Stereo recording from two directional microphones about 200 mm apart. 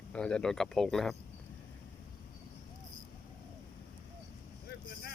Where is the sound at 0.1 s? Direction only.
5° left (ahead or behind).